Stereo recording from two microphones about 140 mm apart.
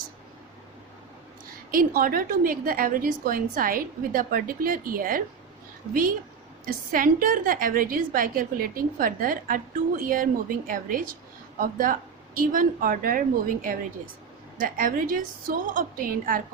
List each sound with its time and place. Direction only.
1.7 s a woman's voice: 90° right